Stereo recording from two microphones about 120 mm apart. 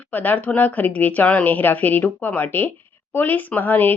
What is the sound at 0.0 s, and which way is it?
A woman's voice, 15° left (ahead or behind).